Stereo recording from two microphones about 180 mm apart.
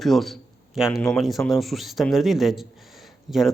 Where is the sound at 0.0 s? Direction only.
Centre (ahead or behind).